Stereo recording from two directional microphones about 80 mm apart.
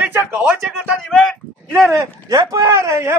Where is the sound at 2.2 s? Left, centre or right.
Right.